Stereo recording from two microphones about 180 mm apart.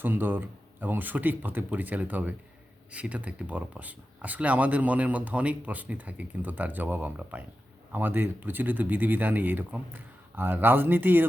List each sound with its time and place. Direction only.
0.0 s speech: 10° right (ahead or behind)